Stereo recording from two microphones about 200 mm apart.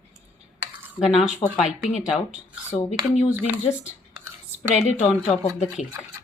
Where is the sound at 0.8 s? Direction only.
5° right (ahead or behind).